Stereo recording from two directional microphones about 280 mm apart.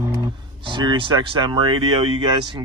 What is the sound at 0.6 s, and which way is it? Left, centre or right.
A man's voice, centre.